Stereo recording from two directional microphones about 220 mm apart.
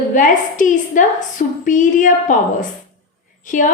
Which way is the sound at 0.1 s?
35° left (ahead or behind).